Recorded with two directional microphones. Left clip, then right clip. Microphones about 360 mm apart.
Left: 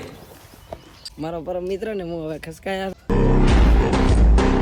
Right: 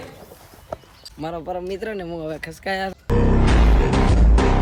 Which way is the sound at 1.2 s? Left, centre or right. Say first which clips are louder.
Left 1 dB; centre.